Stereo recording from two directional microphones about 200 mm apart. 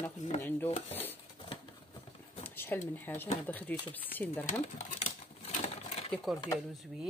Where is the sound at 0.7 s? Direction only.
35° left (ahead or behind).